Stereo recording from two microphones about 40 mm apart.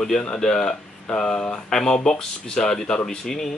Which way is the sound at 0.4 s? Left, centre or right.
Centre.